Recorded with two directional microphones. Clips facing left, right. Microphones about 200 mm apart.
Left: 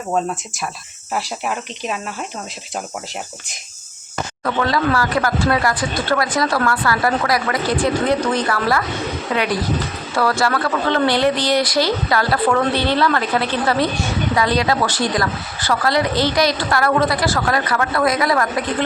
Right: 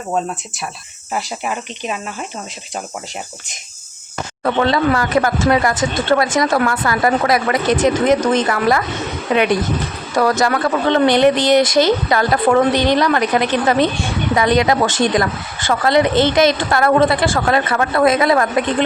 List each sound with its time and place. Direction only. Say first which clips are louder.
1.1 s speech: right 1 dB; centre (ahead or behind)
4.4 s speech: right 4 dB; 25° right (ahead or behind)